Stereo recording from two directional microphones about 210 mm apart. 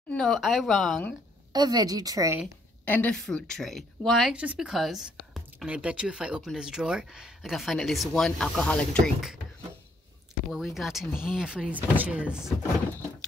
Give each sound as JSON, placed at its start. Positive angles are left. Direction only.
{"t": 0.1, "sound": "speech", "side_deg": 5}
{"t": 1.5, "sound": "a woman's voice", "side_deg": -20}
{"t": 2.8, "sound": "speech", "side_deg": 10}
{"t": 10.5, "sound": "speech", "side_deg": 0}